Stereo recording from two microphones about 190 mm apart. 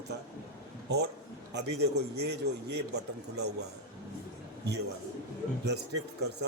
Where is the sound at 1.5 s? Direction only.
60° right (ahead or behind).